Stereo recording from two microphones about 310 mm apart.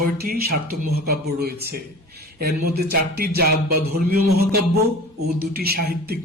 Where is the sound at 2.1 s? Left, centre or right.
Right.